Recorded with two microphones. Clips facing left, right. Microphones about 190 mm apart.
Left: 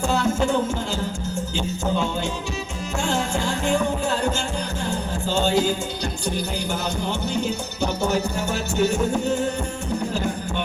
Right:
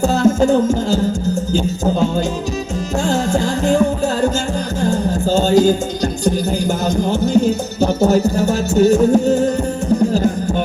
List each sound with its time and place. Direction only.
0.0 s music: 40° right (ahead or behind)
4.8 s music: 40° right (ahead or behind)